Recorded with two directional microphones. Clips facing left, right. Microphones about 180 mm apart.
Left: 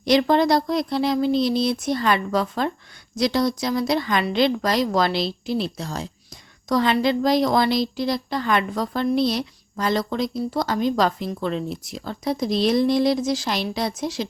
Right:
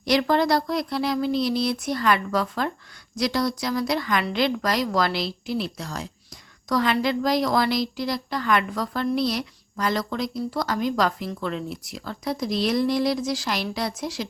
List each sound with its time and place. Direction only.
0.0 s a woman's voice: 20° left (ahead or behind)